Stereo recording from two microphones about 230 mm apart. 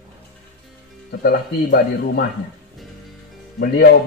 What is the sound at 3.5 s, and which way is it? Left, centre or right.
Speech, left.